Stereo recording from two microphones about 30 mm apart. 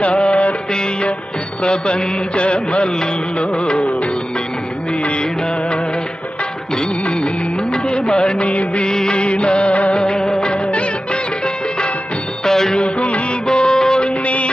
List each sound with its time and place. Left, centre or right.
0.0 s music: left
1.6 s mantra: left
3.3 s music: left
7.0 s music: left
7.7 s music of bollywood: left
8.9 s music of bollywood: left
9.1 s music: left
9.9 s music: left
12.5 s music: centre
12.7 s music: left
13.5 s music: left
14.0 s music: left